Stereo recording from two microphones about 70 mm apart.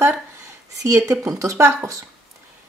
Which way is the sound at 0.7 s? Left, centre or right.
Right.